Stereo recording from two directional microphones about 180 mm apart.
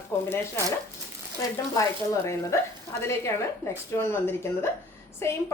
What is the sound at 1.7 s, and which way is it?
Speech, 15° left (ahead or behind).